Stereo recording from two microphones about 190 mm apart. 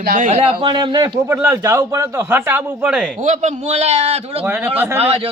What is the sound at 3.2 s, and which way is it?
A man's voice, 40° right (ahead or behind).